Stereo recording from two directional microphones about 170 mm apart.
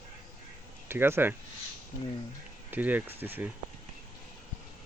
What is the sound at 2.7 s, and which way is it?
Speech, 10° right (ahead or behind).